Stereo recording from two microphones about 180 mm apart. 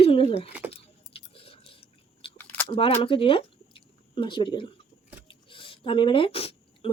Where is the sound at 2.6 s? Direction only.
30° left (ahead or behind).